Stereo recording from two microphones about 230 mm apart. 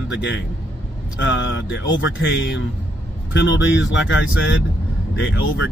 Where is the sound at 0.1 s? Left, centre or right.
Left.